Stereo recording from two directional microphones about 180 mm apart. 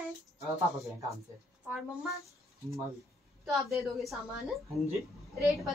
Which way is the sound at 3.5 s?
Centre (ahead or behind).